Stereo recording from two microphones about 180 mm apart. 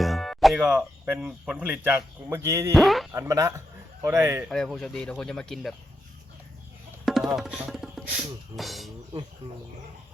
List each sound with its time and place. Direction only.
0.0 s speech: centre (ahead or behind); by 2.7 s 15° right (ahead or behind)
2.7 s speech: centre (ahead or behind)
3.1 s speech: 15° right (ahead or behind)
4.4 s speech: centre (ahead or behind)
7.0 s music: centre (ahead or behind)
8.5 s speech: centre (ahead or behind)